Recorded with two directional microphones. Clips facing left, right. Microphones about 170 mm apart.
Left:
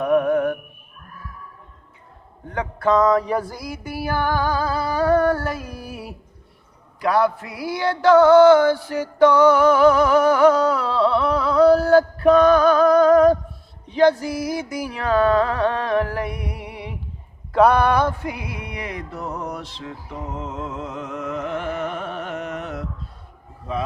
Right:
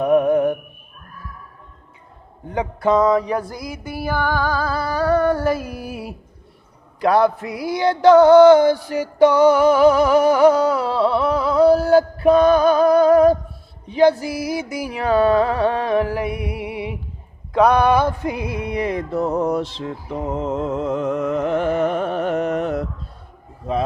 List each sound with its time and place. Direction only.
0.0 s music: 20° right (ahead or behind)
2.5 s music: 10° right (ahead or behind)
3.9 s music: 10° left (ahead or behind)
5.5 s speech: 5° right (ahead or behind)
7.0 s music: 25° right (ahead or behind); by 17.0 s 5° right (ahead or behind)
17.5 s speech: 5° left (ahead or behind)
18.2 s music: 20° right (ahead or behind)